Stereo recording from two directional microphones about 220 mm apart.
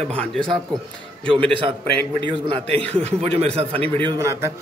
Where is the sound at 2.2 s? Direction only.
20° right (ahead or behind).